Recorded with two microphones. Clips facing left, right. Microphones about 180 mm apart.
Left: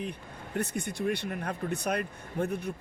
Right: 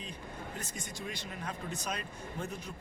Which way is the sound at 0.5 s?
60° left (ahead or behind).